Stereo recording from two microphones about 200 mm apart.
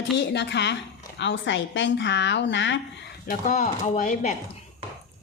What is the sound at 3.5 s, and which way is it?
Speech, 35° left (ahead or behind).